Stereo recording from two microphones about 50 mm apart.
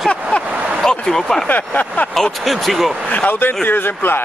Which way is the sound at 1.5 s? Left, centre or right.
Left.